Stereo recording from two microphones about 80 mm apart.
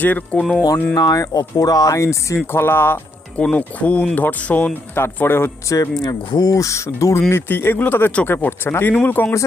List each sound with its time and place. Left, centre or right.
0.0 s speech: centre
0.9 s speech: left; by 4.7 s centre
4.9 s speech: left
6.0 s speech: left